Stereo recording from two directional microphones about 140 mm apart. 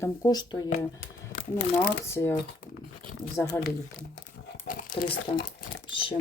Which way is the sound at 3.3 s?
20° left (ahead or behind).